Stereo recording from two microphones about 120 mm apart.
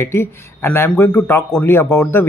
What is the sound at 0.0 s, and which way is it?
A man's voice, 20° left (ahead or behind).